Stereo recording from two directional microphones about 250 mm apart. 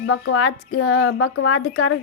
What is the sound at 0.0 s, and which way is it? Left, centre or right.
Speech, left.